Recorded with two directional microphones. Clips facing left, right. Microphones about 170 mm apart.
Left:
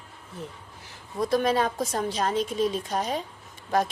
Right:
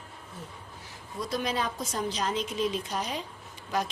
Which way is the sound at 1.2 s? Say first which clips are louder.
Left 7 dB; 55° left (ahead or behind).